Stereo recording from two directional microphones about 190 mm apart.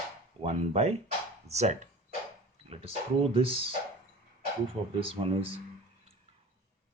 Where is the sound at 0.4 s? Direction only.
35° right (ahead or behind).